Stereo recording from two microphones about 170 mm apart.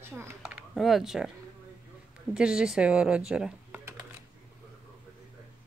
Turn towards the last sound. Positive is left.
turn(degrees=-10)  # may be behind; listen again after turning